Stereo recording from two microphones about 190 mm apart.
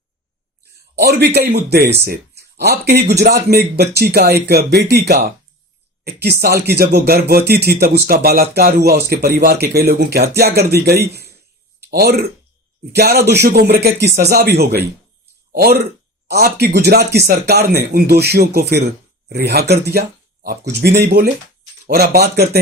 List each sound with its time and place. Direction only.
1.0 s speech: 60° right (ahead or behind)